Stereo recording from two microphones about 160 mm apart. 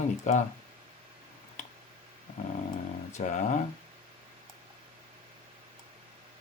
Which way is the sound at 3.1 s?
50° left (ahead or behind).